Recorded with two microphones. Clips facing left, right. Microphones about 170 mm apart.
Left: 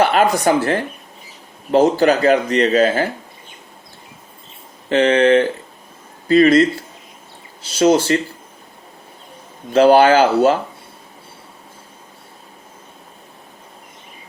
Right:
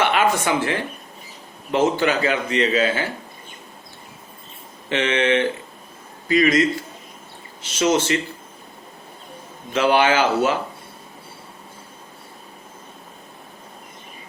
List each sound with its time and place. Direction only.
0.0 s speech: 40° left (ahead or behind)
4.9 s speech: 40° left (ahead or behind)
9.7 s speech: 40° left (ahead or behind)